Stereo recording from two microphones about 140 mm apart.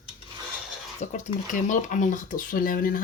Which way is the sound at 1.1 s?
60° left (ahead or behind).